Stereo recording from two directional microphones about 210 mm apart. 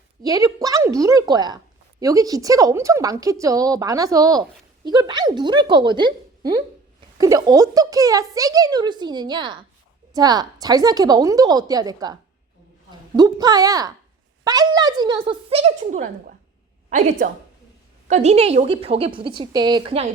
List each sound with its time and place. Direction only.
0.2 s a woman's voice: 15° right (ahead or behind); by 16.0 s 30° right (ahead or behind)
18.1 s a woman's voice: 30° right (ahead or behind)